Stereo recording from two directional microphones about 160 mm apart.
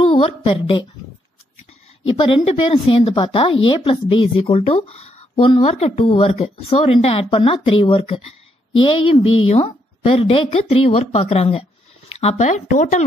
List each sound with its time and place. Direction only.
0.1 s a woman's voice: 40° left (ahead or behind)
2.0 s speech: 30° left (ahead or behind)
5.3 s a woman's voice: 30° left (ahead or behind); by 13.0 s 50° left (ahead or behind)